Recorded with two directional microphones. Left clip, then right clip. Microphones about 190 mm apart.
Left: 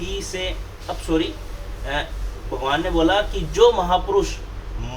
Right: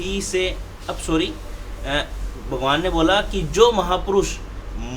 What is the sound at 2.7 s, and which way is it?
Speech, 50° right (ahead or behind).